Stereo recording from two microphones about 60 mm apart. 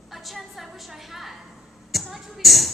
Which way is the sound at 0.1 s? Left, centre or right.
Centre.